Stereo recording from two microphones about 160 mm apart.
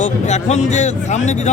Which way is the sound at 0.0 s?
45° left (ahead or behind).